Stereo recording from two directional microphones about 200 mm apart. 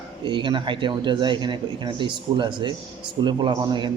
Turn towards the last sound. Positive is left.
turn(degrees=-25)  # may be behind; listen again after turning